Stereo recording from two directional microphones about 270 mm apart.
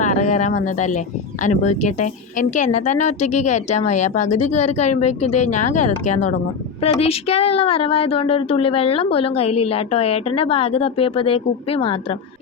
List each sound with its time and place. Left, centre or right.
0.0 s a woman's voice: left